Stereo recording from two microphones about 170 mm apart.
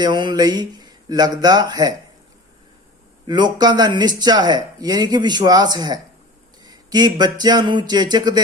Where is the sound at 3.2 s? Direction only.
25° right (ahead or behind).